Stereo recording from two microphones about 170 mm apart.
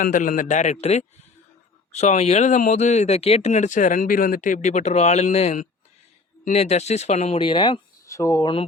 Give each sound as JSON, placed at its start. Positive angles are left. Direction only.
{"t": 0.0, "sound": "speech", "side_deg": 50}